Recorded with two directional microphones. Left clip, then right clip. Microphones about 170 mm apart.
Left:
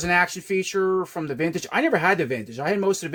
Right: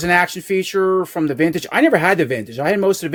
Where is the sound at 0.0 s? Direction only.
35° right (ahead or behind).